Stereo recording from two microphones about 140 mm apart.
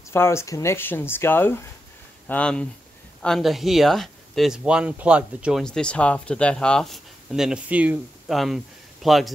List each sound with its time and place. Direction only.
0.1 s speech: 20° left (ahead or behind); by 5.6 s 10° right (ahead or behind)
5.6 s speech: 5° left (ahead or behind)